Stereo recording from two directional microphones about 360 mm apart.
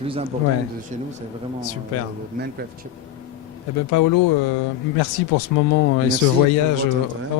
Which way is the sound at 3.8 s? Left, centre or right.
Left.